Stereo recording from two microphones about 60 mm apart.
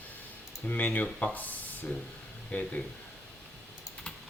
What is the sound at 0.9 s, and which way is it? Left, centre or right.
Speech, left.